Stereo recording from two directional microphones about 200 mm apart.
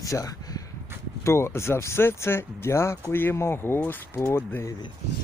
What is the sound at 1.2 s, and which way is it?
Speech, 15° left (ahead or behind).